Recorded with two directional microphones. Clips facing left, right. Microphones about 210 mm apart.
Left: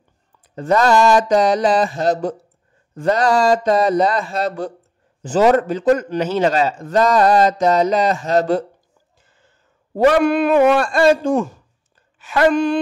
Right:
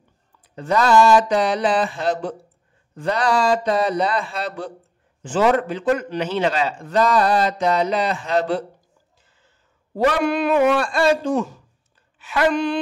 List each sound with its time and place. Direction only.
0.6 s a man's voice: 45° left (ahead or behind)
9.9 s a man's voice: 50° left (ahead or behind)